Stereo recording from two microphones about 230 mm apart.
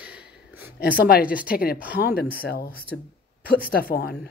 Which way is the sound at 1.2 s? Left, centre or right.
Centre.